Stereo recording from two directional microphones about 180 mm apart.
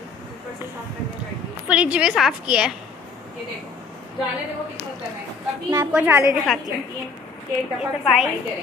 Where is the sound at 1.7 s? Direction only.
5° right (ahead or behind).